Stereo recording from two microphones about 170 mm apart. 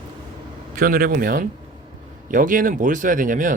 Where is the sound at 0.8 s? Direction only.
60° right (ahead or behind).